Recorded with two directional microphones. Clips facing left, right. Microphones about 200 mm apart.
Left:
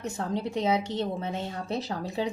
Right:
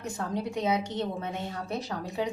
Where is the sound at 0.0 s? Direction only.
30° left (ahead or behind).